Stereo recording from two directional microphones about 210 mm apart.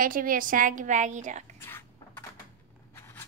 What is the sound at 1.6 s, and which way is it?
Cough, 10° left (ahead or behind).